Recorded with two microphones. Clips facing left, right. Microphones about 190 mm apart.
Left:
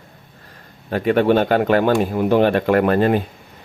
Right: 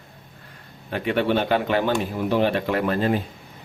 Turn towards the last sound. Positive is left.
turn(degrees=60)  # may be behind; listen again after turning